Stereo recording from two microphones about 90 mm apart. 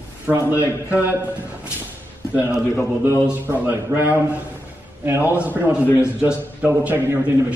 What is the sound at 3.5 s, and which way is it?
A man's voice, 20° right (ahead or behind).